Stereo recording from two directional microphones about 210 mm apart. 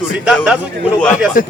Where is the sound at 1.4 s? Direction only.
40° left (ahead or behind).